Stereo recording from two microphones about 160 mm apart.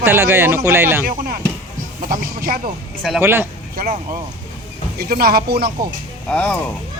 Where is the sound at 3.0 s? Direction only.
10° right (ahead or behind).